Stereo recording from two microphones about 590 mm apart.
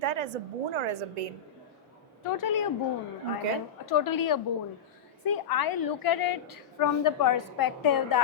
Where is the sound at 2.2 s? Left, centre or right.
Left.